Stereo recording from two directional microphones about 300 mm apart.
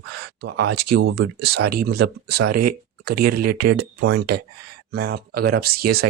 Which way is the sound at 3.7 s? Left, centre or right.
Right.